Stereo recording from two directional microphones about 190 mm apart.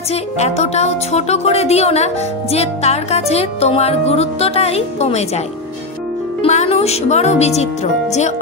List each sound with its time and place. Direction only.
0.1 s music: 35° left (ahead or behind)
6.4 s music: 35° left (ahead or behind)